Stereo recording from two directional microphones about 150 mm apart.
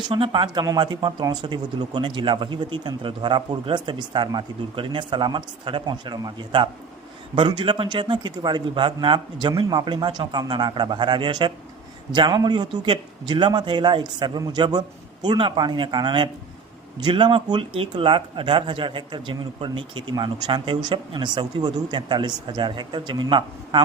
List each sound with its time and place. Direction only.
0.1 s a man's voice: 35° right (ahead or behind)